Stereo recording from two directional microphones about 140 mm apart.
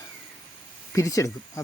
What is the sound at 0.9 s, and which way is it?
Speech, 20° left (ahead or behind).